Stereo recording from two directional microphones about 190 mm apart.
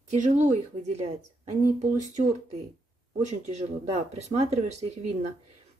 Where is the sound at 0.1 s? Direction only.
40° right (ahead or behind).